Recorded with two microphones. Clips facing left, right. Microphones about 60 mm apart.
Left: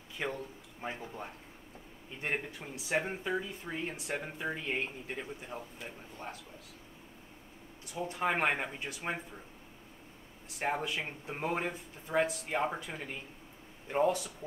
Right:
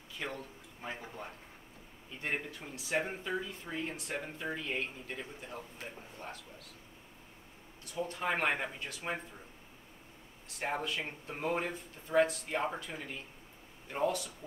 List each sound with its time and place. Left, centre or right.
0.2 s a man's voice: centre
2.2 s speech: centre
4.6 s speech: left
7.8 s speech: centre
10.6 s speech: centre